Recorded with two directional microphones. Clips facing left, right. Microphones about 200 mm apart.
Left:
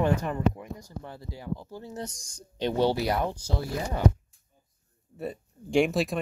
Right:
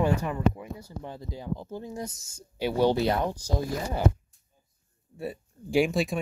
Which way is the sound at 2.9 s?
25° right (ahead or behind).